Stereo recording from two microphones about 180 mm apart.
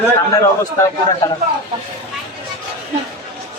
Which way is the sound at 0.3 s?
20° left (ahead or behind).